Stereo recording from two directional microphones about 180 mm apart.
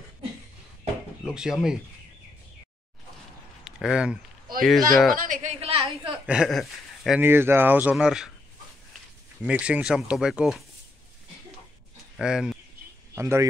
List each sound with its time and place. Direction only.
1.3 s speech: 5° right (ahead or behind)
3.6 s speech: 5° right (ahead or behind)
5.1 s a man's voice: 50° right (ahead or behind)
5.6 s a woman's voice: 35° right (ahead or behind)
6.2 s speech: 5° right (ahead or behind)
7.2 s speech: 10° right (ahead or behind)
9.4 s speech: 5° right (ahead or behind)
12.2 s speech: 5° right (ahead or behind)
13.1 s speech: 15° right (ahead or behind)